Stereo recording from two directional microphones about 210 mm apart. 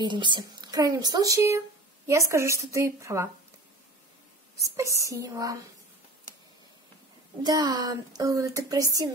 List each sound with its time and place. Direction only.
0.0 s speech: 20° right (ahead or behind)
4.7 s speech: 15° right (ahead or behind)
7.4 s speech: 20° right (ahead or behind)